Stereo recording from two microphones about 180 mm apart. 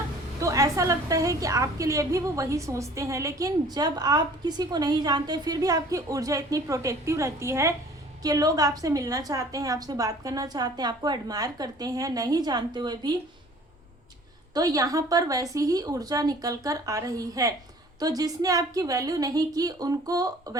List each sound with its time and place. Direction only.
0.3 s a woman's voice: 15° right (ahead or behind)
14.5 s a woman's voice: 20° right (ahead or behind)